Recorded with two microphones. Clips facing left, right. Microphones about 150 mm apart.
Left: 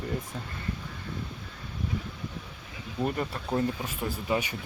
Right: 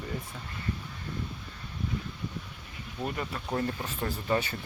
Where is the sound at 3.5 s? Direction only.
10° left (ahead or behind).